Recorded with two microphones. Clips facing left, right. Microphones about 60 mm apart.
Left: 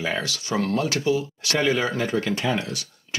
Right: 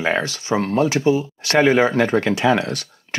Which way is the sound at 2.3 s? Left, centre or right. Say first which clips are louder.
Right 7 dB; right.